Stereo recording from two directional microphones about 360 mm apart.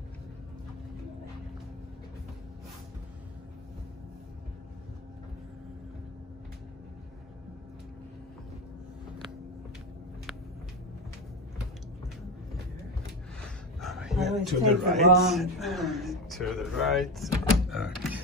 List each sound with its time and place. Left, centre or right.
13.7 s speech: centre